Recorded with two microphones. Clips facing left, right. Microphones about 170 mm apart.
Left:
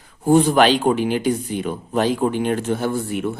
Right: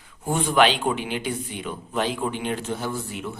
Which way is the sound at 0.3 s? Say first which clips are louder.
Left 6 dB; 35° left (ahead or behind).